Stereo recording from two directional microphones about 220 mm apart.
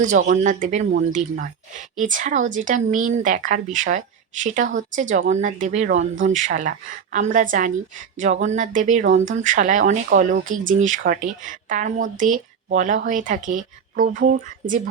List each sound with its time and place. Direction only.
0.0 s speech: 35° right (ahead or behind)